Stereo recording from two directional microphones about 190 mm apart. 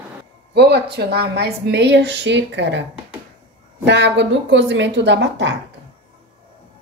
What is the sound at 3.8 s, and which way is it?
A woman's voice, 65° right (ahead or behind).